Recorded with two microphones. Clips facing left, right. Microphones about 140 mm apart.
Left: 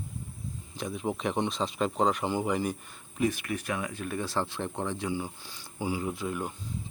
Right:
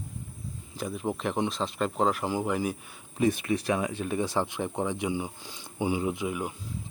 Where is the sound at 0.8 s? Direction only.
Centre (ahead or behind).